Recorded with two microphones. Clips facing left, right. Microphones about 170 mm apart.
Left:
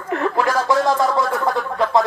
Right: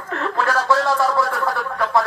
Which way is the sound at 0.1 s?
15° left (ahead or behind).